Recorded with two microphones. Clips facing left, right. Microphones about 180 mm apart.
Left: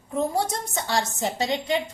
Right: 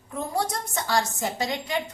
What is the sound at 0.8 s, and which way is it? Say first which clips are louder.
Speech: right 1 dB; 25° left (ahead or behind).